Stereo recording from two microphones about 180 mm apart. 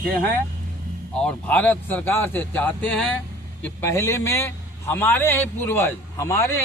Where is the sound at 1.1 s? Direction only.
5° left (ahead or behind).